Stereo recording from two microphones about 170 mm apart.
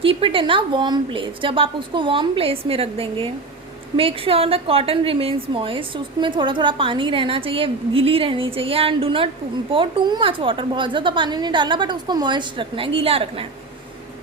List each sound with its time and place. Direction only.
0.0 s a woman's voice: 30° right (ahead or behind)